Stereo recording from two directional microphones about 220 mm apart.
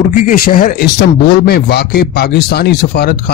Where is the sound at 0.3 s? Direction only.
40° left (ahead or behind).